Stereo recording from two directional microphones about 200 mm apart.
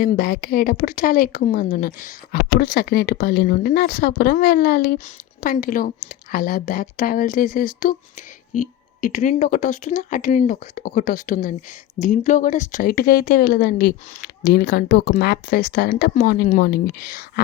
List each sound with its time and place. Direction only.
0.0 s speech: 50° left (ahead or behind)